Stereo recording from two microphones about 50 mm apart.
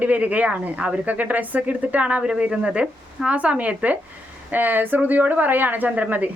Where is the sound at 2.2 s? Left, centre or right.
Centre.